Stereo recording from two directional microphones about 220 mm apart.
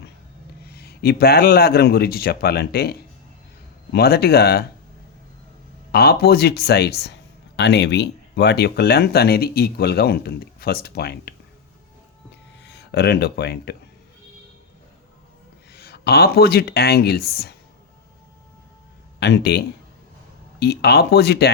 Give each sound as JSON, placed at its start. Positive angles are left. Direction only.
{"t": 0.6, "sound": "speech", "side_deg": 45}
{"t": 5.9, "sound": "speech", "side_deg": 45}
{"t": 12.6, "sound": "speech", "side_deg": 50}
{"t": 15.7, "sound": "speech", "side_deg": 45}
{"t": 19.2, "sound": "speech", "side_deg": 50}